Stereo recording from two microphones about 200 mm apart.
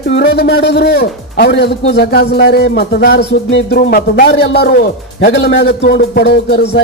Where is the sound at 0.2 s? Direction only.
55° left (ahead or behind).